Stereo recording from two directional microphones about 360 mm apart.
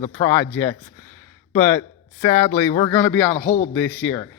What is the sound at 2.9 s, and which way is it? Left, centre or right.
Speech, centre.